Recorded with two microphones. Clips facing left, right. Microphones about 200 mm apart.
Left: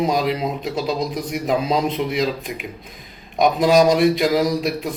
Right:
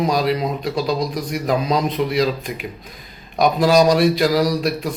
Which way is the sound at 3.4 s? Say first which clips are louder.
Even; 20° left (ahead or behind).